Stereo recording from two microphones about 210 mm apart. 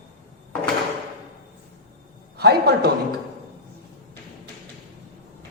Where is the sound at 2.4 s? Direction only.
50° right (ahead or behind).